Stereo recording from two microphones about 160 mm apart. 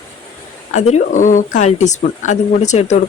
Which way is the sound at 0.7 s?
45° left (ahead or behind).